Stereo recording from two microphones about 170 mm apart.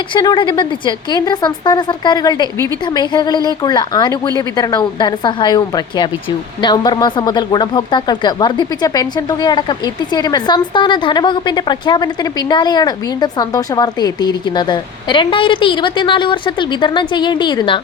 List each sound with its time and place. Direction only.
0.1 s speech: 25° left (ahead or behind)